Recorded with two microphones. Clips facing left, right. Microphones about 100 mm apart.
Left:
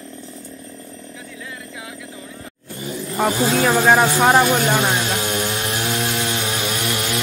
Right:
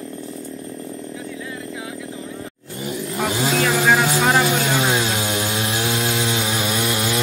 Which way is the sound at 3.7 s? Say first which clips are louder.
Left 4 dB; 25° left (ahead or behind).